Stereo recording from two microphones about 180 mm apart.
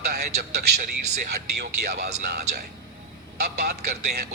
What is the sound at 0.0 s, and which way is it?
Speech, 60° right (ahead or behind).